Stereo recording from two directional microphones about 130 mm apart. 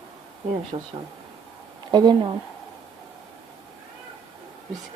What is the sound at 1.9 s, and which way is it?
Speech, 35° right (ahead or behind).